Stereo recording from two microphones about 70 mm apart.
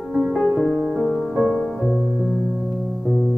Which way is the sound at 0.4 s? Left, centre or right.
Centre.